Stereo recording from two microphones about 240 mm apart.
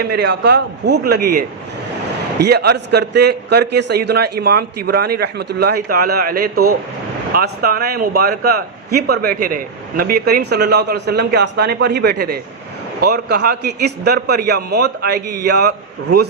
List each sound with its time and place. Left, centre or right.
0.1 s a man's voice: right